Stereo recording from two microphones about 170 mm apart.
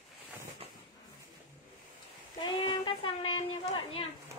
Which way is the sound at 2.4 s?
30° left (ahead or behind).